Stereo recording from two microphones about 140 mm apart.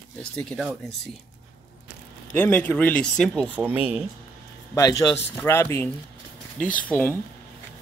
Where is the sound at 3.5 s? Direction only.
10° right (ahead or behind).